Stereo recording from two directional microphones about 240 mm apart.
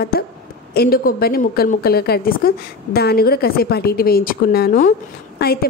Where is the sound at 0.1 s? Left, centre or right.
Left.